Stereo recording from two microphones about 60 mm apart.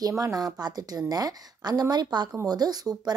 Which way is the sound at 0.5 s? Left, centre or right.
Right.